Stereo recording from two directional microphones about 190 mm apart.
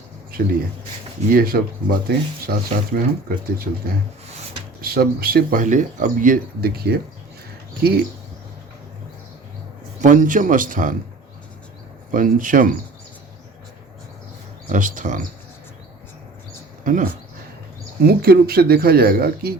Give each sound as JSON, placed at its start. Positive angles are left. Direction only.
{"t": 0.3, "sound": "speech", "side_deg": -50}
{"t": 10.0, "sound": "speech", "side_deg": -45}
{"t": 12.1, "sound": "speech", "side_deg": -45}
{"t": 14.7, "sound": "speech", "side_deg": -45}
{"t": 16.8, "sound": "speech", "side_deg": -45}